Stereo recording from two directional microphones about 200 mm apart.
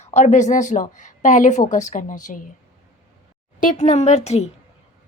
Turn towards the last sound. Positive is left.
turn(degrees=35)  # may be behind; listen again after turning